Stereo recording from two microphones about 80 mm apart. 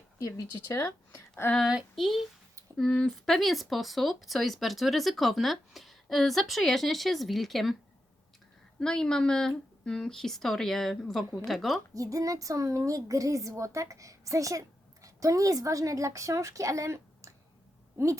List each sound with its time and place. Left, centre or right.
0.2 s speech: left
1.6 s speech: centre
8.8 s speech: centre
11.9 s a woman's voice: right